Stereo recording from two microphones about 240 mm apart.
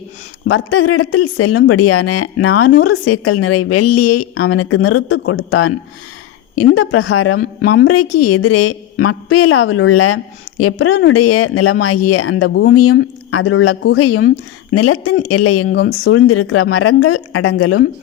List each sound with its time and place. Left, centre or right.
0.4 s a woman's voice: left
7.6 s a woman's voice: left
7.9 s a woman's voice: left
15.7 s a woman's voice: left